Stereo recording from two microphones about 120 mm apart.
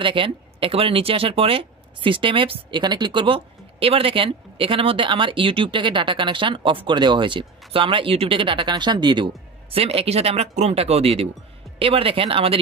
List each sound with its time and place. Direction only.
0.0 s speech: 45° right (ahead or behind)